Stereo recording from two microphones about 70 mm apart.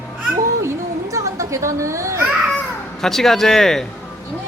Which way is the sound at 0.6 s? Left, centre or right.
Right.